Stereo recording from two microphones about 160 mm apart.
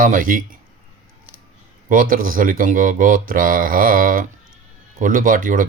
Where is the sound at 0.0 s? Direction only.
60° right (ahead or behind).